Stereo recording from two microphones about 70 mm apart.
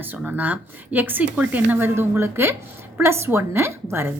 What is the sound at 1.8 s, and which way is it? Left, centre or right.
Speech, right.